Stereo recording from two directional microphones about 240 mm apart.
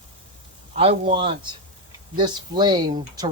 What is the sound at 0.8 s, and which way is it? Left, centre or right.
Speech, right.